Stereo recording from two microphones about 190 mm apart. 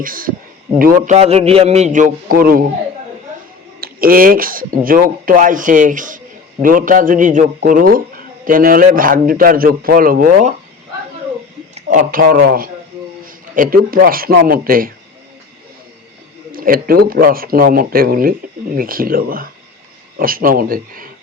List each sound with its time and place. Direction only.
0.0 s a man's voice: 45° right (ahead or behind)
3.8 s a man's voice: 50° right (ahead or behind)
11.7 s a man's voice: 45° right (ahead or behind)
16.5 s a man's voice: 50° right (ahead or behind)